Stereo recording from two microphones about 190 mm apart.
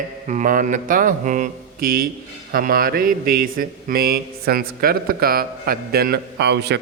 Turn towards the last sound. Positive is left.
turn(degrees=-60)  # may be behind; listen again after turning